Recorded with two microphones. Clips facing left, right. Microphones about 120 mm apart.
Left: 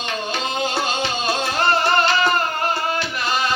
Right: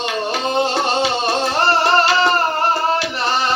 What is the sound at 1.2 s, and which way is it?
Music, 35° right (ahead or behind).